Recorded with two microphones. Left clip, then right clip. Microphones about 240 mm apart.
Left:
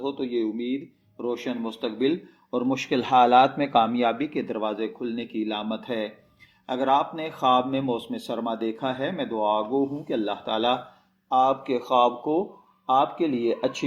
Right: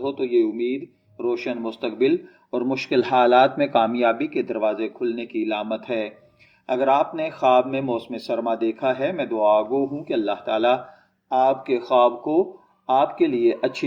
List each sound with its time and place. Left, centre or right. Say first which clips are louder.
0.0 s speech: right 6 dB; left